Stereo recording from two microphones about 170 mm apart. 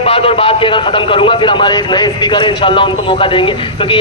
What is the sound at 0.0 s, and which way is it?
A man's voice, 35° left (ahead or behind).